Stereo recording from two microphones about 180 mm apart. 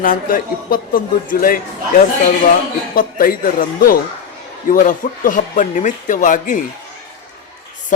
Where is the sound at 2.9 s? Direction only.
50° left (ahead or behind).